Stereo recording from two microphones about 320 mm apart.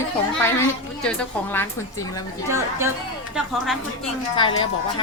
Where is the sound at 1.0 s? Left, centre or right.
Centre.